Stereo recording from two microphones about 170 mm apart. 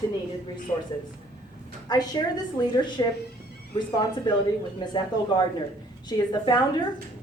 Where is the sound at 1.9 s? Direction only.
25° left (ahead or behind).